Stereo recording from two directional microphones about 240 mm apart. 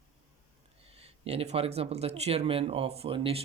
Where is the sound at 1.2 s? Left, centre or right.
Right.